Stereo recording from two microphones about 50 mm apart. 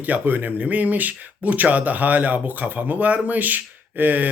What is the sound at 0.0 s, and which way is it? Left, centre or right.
Speech, right.